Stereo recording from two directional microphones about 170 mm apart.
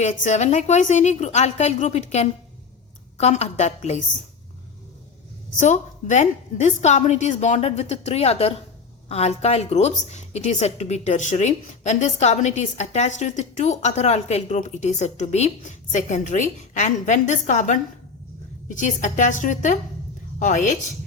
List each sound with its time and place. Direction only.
0.0 s a woman's voice: 45° left (ahead or behind)
5.5 s a woman's voice: 45° left (ahead or behind)